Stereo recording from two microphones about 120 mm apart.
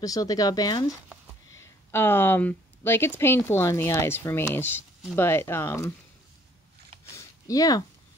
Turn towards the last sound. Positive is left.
turn(degrees=30)  # may be behind; listen again after turning